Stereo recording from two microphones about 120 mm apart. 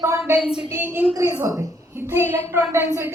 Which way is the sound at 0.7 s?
20° right (ahead or behind).